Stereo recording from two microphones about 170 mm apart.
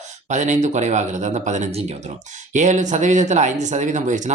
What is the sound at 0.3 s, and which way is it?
Speech, 45° right (ahead or behind).